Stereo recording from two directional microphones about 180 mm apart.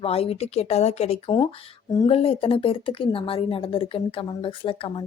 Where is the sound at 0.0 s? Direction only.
35° left (ahead or behind).